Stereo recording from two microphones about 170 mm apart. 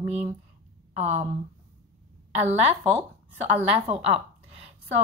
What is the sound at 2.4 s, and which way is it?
A woman's voice, 40° right (ahead or behind).